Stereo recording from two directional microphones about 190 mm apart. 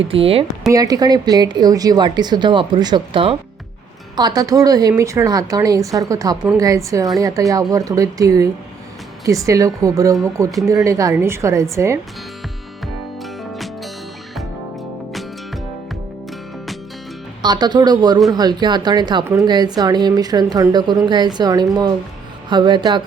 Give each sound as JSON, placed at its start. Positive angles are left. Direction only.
{"t": 0.0, "sound": "speech", "side_deg": -30}
{"t": 0.7, "sound": "a woman's voice", "side_deg": -20}
{"t": 17.4, "sound": "a woman's voice", "side_deg": -20}